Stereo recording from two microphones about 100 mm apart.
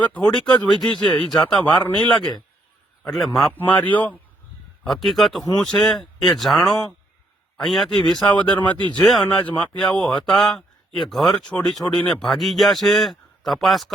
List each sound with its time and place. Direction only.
0.0 s speech: 10° left (ahead or behind)
3.8 s speech: 15° left (ahead or behind)
4.8 s speech: centre (ahead or behind)
9.0 s speech: 5° left (ahead or behind)